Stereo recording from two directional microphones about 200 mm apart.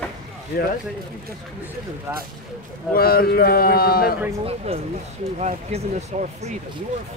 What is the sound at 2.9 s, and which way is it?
A man's voice, 50° left (ahead or behind).